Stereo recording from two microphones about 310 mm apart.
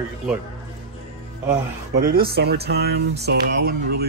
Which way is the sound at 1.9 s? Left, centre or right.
Right.